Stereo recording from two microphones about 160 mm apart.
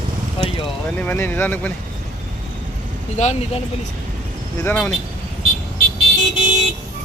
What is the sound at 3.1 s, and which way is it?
Speech, 45° left (ahead or behind).